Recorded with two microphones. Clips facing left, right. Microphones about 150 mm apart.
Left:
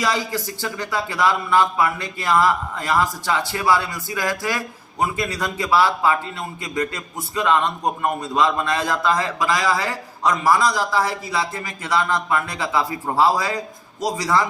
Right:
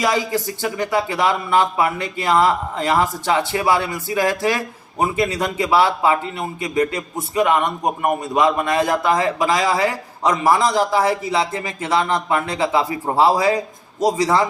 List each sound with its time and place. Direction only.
0.0 s speech: 20° right (ahead or behind)